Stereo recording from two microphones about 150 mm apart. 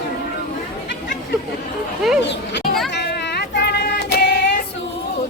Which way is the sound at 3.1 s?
90° left.